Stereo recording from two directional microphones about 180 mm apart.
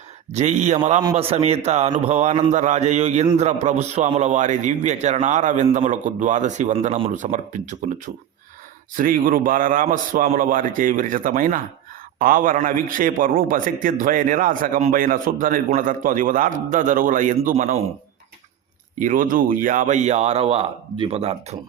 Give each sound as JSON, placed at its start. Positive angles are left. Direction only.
{"t": 0.3, "sound": "a man's voice", "side_deg": -40}
{"t": 18.9, "sound": "speech", "side_deg": -45}